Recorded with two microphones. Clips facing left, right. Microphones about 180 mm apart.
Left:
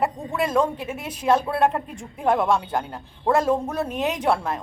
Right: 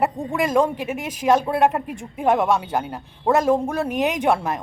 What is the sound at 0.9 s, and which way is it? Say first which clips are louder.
Speech: right 4 dB; 90° right.